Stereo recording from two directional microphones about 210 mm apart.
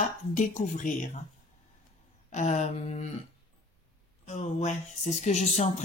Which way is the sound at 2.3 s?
35° left (ahead or behind).